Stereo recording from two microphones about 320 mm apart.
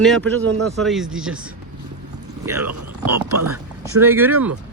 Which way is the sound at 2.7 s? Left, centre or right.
Right.